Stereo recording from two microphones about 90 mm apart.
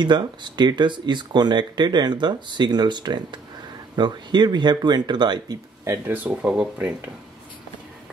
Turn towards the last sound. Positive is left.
turn(degrees=-15)  # may be behind; listen again after turning